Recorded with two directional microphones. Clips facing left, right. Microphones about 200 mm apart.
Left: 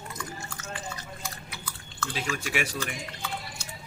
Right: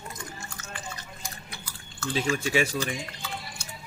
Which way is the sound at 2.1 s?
30° right (ahead or behind).